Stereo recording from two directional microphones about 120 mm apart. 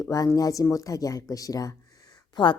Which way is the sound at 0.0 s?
25° left (ahead or behind).